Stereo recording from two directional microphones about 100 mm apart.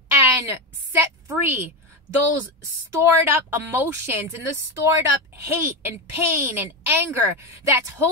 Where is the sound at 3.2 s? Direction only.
20° right (ahead or behind).